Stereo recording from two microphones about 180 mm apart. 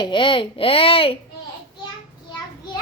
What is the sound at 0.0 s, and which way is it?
A woman's voice, 25° left (ahead or behind).